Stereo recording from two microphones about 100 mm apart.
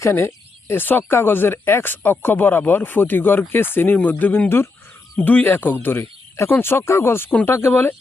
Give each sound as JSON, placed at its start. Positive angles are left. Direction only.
{"t": 0.0, "sound": "speech", "side_deg": 25}